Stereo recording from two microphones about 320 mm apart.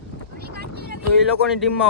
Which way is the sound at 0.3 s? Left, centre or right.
Right.